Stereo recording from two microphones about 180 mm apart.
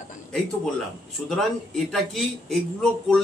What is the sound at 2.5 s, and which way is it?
Speech, 5° left (ahead or behind).